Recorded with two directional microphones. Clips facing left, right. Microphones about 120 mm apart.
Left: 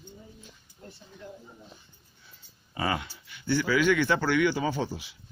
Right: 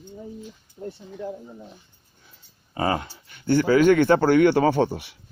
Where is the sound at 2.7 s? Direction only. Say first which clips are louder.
Right 6 dB; 35° right (ahead or behind).